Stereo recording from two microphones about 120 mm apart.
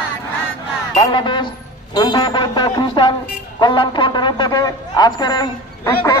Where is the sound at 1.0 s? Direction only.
40° left (ahead or behind).